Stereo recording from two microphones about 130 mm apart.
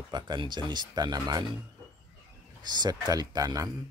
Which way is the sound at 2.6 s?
30° right (ahead or behind).